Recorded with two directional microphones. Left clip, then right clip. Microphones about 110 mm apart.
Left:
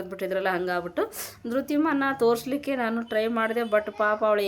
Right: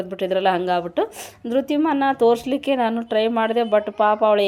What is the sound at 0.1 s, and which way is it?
A woman's voice, 35° right (ahead or behind).